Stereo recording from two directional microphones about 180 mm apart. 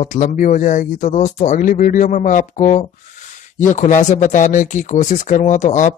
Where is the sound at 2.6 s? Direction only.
35° left (ahead or behind).